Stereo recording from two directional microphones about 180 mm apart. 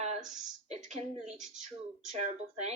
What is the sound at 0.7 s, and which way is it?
Speech, 40° right (ahead or behind).